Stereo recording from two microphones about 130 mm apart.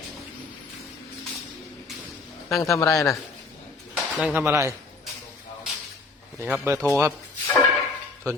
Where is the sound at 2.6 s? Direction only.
25° left (ahead or behind).